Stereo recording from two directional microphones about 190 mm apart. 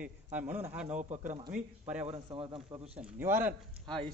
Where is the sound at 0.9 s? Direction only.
40° right (ahead or behind).